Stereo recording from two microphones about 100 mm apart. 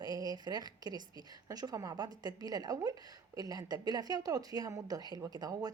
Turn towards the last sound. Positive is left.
turn(degrees=-40)  # may be behind; listen again after turning